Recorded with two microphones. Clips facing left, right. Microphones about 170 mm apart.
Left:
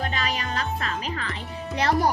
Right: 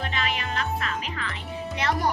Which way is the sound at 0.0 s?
40° left (ahead or behind).